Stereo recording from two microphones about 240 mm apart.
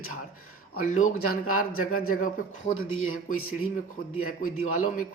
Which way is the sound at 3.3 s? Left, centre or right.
Left.